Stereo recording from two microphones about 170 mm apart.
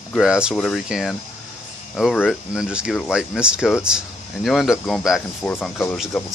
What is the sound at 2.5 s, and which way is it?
Speech, 5° right (ahead or behind).